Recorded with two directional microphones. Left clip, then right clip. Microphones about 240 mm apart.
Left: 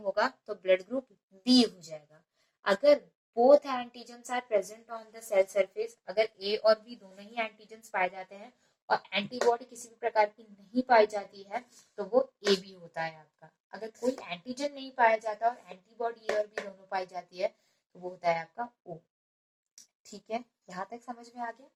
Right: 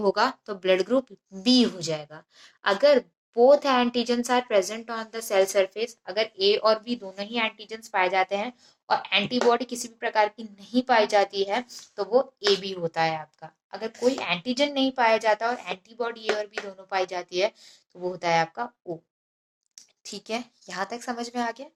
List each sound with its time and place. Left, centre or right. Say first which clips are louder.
0.0 s a woman's voice: right 7 dB; right
20.1 s a woman's voice: right 5 dB; right